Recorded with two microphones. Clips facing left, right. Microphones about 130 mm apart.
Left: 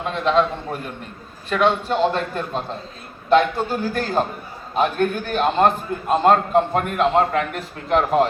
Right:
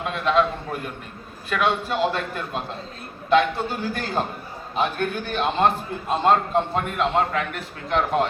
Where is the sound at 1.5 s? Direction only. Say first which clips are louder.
Left 4 dB; 30° left (ahead or behind).